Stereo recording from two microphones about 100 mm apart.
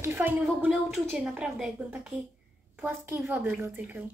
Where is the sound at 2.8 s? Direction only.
20° right (ahead or behind).